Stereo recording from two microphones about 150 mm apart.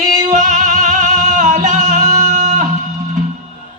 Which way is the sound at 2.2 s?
55° right (ahead or behind).